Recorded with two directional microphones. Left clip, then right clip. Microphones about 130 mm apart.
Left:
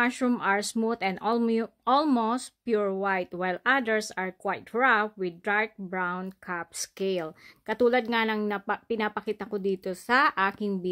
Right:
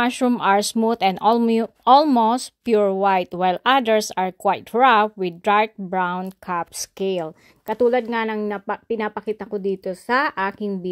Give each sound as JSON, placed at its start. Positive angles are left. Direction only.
{"t": 0.0, "sound": "speech", "side_deg": -40}
{"t": 7.6, "sound": "speech", "side_deg": -10}